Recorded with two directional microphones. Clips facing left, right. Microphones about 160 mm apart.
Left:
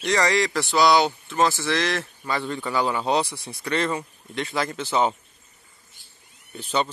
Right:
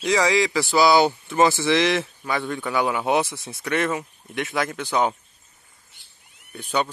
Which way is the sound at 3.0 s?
20° right (ahead or behind).